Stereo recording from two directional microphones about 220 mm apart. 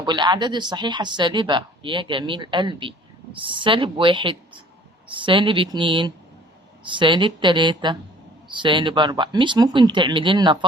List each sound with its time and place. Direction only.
0.0 s a woman's voice: 20° right (ahead or behind)